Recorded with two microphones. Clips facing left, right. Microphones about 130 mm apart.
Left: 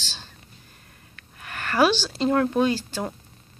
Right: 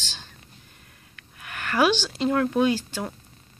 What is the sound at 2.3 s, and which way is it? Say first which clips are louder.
Speech: left 2 dB; centre (ahead or behind).